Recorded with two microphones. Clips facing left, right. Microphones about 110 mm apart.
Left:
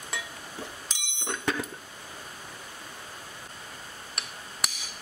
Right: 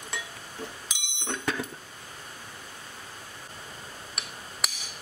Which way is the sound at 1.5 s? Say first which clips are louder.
Left 1 dB; centre (ahead or behind).